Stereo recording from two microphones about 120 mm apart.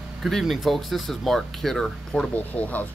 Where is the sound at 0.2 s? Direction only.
Centre (ahead or behind).